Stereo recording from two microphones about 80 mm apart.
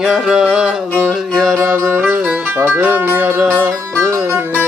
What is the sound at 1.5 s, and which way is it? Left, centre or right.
Music, right.